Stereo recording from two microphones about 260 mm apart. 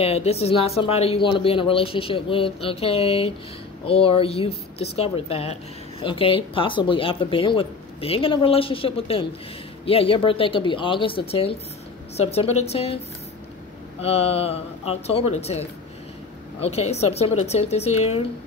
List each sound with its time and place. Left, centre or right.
0.0 s a woman's voice: left
14.0 s a woman's voice: left
16.6 s a woman's voice: left